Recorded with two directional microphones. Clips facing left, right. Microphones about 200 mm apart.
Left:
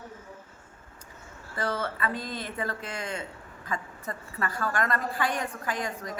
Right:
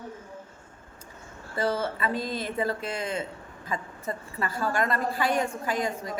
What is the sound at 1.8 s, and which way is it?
A woman's voice, 25° right (ahead or behind).